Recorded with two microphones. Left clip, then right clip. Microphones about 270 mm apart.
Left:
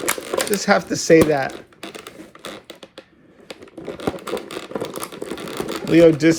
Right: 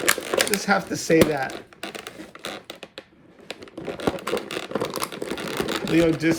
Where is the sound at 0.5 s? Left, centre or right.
Centre.